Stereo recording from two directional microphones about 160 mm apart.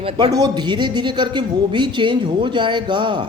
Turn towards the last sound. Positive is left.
turn(degrees=-30)  # may be behind; listen again after turning